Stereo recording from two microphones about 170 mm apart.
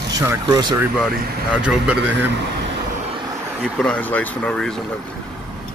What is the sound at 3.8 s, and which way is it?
Speech, 10° left (ahead or behind).